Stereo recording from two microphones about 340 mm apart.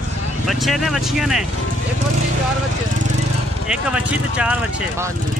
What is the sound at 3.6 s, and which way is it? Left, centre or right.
Speech, centre.